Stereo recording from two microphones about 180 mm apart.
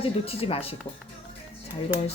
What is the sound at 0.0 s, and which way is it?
Speech, 30° left (ahead or behind).